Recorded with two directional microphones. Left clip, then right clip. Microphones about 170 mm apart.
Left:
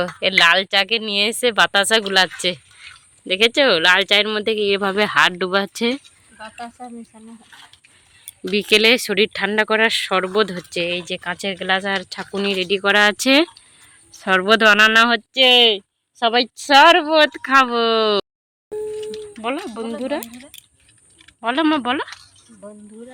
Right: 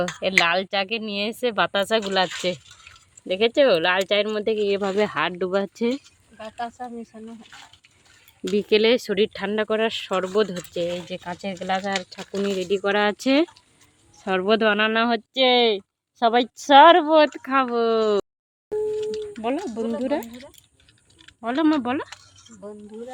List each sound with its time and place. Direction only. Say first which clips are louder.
0.2 s speech: left 6 dB; 5° left (ahead or behind)
6.6 s speech: right 4 dB; 25° right (ahead or behind)
8.4 s speech: left 4 dB; 5° left (ahead or behind)
15.3 s a woman's voice: left 3 dB; 10° right (ahead or behind)
17.4 s speech: left 6 dB; 5° left (ahead or behind)
18.9 s a sound: right 2 dB; 45° right (ahead or behind)
19.6 s a woman's voice: even; 15° right (ahead or behind)
21.4 s speech: left 4 dB; 5° right (ahead or behind)